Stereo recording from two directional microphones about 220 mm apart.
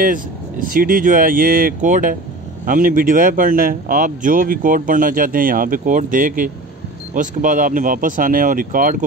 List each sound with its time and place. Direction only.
0.0 s speech: 40° right (ahead or behind)